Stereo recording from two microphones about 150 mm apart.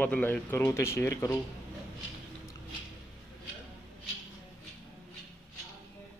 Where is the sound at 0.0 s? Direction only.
10° left (ahead or behind).